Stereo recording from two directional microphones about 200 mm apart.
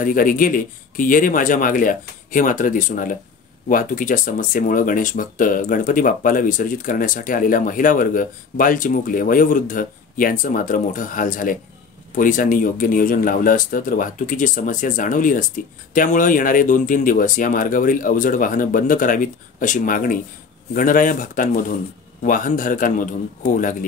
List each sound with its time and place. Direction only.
0.0 s speech: 45° left (ahead or behind)